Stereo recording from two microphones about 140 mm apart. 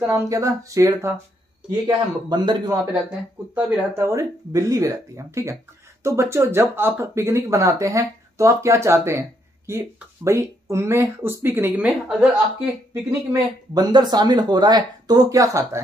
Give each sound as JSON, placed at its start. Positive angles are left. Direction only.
{"t": 0.0, "sound": "speech", "side_deg": -20}
{"t": 3.5, "sound": "speech", "side_deg": -10}
{"t": 13.3, "sound": "speech", "side_deg": -30}